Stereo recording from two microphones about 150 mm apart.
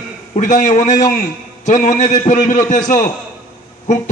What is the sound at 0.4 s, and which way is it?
A man's voice, 60° left (ahead or behind).